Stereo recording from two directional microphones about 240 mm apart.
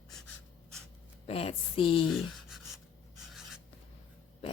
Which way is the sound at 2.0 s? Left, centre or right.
Centre.